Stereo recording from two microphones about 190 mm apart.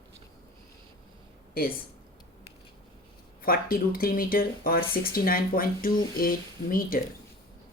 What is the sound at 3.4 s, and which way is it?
Speech, 50° left (ahead or behind).